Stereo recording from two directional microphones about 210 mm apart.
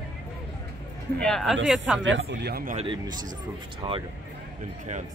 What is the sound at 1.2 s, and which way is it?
Speech, centre (ahead or behind).